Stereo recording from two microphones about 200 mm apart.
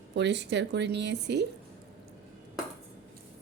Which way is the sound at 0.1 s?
60° right (ahead or behind).